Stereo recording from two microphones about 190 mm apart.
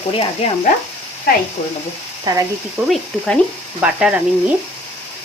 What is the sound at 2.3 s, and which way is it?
Ratchet, 20° right (ahead or behind).